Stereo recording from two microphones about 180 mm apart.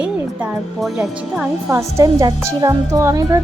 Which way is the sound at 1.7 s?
15° right (ahead or behind).